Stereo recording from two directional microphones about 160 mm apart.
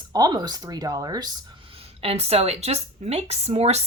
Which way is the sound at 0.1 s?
25° right (ahead or behind).